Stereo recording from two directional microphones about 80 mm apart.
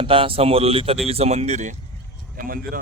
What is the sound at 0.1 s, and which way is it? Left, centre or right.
Speech, right.